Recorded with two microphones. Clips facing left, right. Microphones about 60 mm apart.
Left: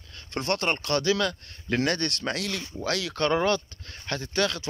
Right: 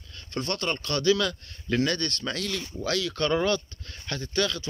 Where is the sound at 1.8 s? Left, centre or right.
Left.